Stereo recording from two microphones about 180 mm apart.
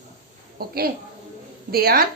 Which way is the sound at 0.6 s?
55° right (ahead or behind).